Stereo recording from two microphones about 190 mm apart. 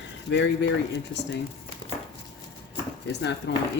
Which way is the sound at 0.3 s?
65° left (ahead or behind).